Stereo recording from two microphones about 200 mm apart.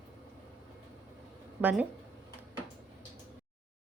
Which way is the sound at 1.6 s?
10° right (ahead or behind).